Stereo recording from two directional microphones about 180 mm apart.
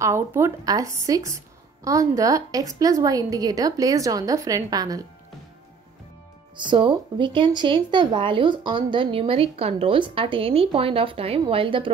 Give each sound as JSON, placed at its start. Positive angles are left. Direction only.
{"t": 0.0, "sound": "a woman's voice", "side_deg": -15}
{"t": 6.5, "sound": "speech", "side_deg": -25}